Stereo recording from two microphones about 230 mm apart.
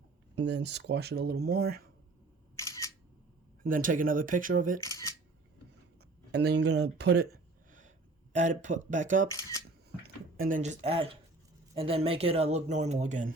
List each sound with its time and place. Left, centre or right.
0.3 s speech: right
2.6 s single-lens reflex camera: centre
3.6 s speech: right
4.8 s speech: centre
6.3 s speech: right
7.7 s a sound: right
9.3 s speech: centre
10.0 s speech: right